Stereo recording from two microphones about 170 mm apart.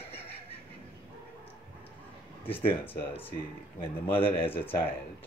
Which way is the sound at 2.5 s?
30° left (ahead or behind).